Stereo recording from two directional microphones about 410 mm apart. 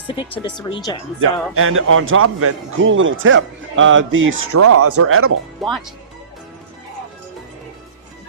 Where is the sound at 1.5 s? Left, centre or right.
Right.